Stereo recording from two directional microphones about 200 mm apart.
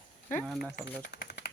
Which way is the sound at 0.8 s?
60° left (ahead or behind).